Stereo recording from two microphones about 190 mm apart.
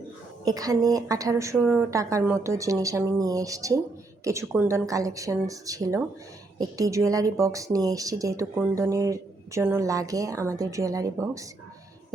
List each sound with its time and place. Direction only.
0.4 s speech: 20° right (ahead or behind)